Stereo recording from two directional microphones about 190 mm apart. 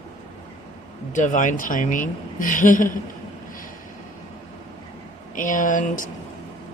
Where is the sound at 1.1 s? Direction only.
40° left (ahead or behind).